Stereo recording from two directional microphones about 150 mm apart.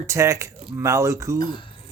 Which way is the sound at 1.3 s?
25° left (ahead or behind).